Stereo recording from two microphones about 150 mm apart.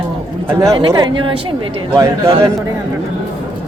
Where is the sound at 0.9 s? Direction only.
25° right (ahead or behind).